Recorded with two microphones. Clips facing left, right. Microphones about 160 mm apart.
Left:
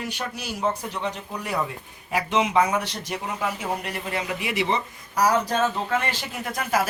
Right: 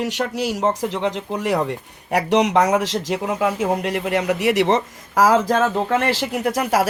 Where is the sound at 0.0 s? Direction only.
80° right.